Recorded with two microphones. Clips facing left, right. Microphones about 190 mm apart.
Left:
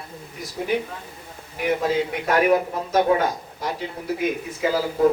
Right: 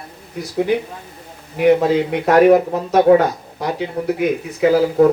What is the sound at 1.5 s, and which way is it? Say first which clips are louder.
A man's voice: right 8 dB; 70° right (ahead or behind).